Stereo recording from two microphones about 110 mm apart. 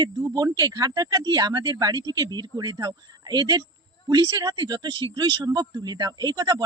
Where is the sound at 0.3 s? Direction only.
35° right (ahead or behind).